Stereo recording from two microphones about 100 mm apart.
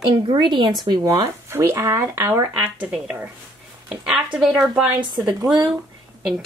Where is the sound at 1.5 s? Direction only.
30° right (ahead or behind).